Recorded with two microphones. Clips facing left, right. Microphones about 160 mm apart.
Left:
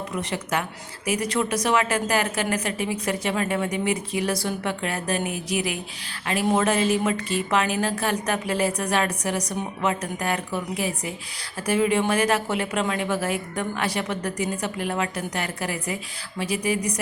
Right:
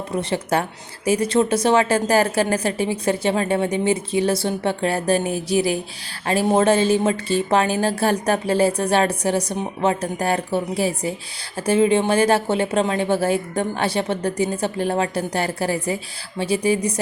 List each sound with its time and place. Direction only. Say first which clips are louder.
0.1 s a woman's voice: right 8 dB; 30° right (ahead or behind)